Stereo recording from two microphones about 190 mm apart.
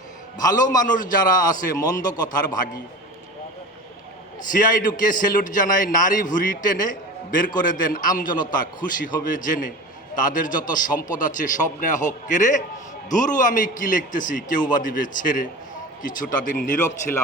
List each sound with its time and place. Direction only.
0.3 s a man's voice: 20° left (ahead or behind)
4.5 s a man's voice: 45° left (ahead or behind)
8.8 s a man's voice: 20° left (ahead or behind)
9.2 s a man's voice: 45° left (ahead or behind)